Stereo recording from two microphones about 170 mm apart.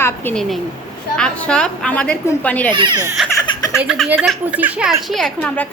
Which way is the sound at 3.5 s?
25° left (ahead or behind).